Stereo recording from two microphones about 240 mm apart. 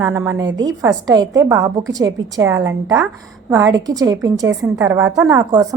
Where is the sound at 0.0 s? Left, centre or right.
Centre.